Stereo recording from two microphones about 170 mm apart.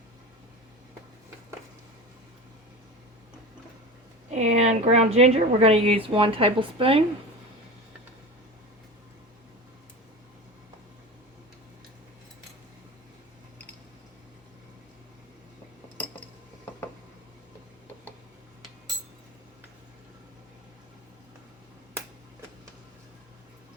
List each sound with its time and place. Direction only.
4.3 s a woman's voice: 40° right (ahead or behind)